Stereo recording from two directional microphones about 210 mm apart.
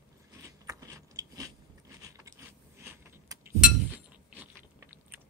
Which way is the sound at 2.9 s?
15° right (ahead or behind).